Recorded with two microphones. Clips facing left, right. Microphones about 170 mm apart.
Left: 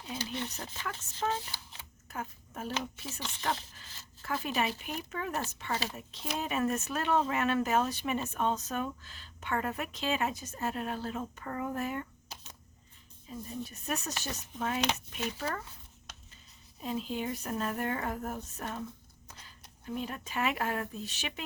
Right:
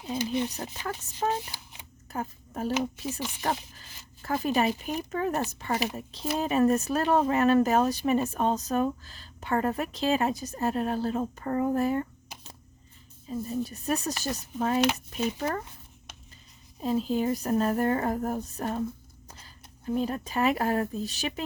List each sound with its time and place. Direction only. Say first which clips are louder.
0.2 s speech: right 10 dB; 15° right (ahead or behind)
2.0 s speech: right 6 dB; 35° right (ahead or behind)
3.1 s speech: right 5 dB; 15° right (ahead or behind)
4.2 s a woman's voice: right 7 dB; 40° right (ahead or behind)
5.7 s speech: right 6 dB; 15° right (ahead or behind)
6.0 s a woman's voice: right 7 dB; 35° right (ahead or behind)
12.3 s a sound: right 2 dB; 15° right (ahead or behind)
13.2 s a woman's voice: right 9 dB; 35° right (ahead or behind)
16.8 s a woman's voice: right 8 dB; 40° right (ahead or behind)
19.8 s a woman's voice: right 9 dB; 35° right (ahead or behind)